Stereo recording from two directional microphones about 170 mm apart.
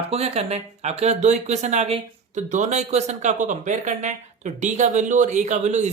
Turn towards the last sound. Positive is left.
turn(degrees=-45)  # may be behind; listen again after turning